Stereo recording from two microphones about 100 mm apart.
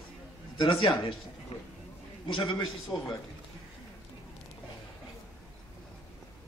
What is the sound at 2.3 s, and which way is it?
Speech, 60° left (ahead or behind).